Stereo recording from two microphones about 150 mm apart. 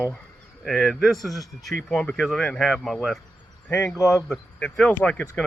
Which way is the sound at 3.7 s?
15° left (ahead or behind).